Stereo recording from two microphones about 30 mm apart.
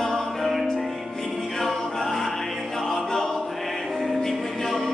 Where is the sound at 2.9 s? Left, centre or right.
Centre.